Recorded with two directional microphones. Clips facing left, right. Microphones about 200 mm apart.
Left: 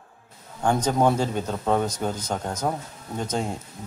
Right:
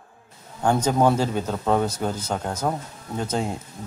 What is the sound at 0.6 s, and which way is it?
Speech, 10° right (ahead or behind).